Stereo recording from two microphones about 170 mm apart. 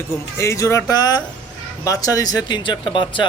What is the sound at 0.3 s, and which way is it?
Speech, 15° left (ahead or behind).